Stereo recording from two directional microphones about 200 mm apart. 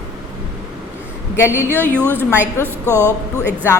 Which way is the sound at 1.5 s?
10° right (ahead or behind).